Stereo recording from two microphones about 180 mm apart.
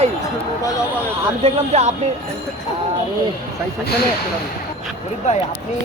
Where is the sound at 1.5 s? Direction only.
35° right (ahead or behind).